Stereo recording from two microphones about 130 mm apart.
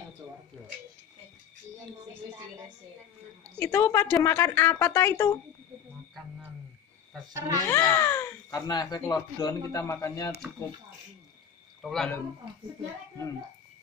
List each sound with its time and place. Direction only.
2.3 s a sound: 20° right (ahead or behind)
3.5 s a woman's voice: 20° left (ahead or behind)
7.3 s speech: 30° right (ahead or behind)
7.6 s a woman's voice: 20° left (ahead or behind)
11.8 s a man's voice: 5° left (ahead or behind)